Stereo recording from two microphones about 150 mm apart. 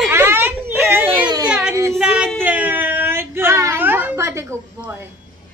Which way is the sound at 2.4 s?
10° right (ahead or behind).